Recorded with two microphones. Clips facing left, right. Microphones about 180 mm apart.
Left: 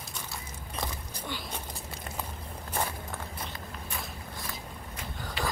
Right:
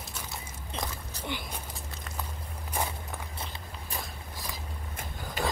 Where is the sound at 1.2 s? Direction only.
15° right (ahead or behind).